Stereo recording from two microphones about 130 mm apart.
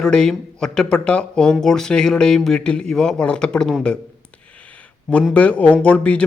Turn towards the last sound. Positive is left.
turn(degrees=10)  # may be behind; listen again after turning